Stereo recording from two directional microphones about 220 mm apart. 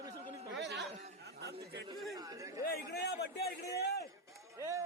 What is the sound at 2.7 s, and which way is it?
A man's voice, 45° left (ahead or behind).